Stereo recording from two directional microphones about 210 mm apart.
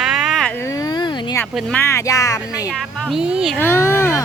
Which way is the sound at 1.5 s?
5° left (ahead or behind).